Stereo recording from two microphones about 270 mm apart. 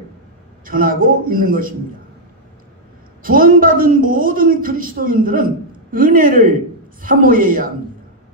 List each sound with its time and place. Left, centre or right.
0.7 s a woman's voice: right
3.2 s a woman's voice: right